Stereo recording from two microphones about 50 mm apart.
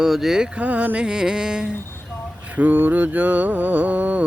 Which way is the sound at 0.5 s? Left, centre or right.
Right.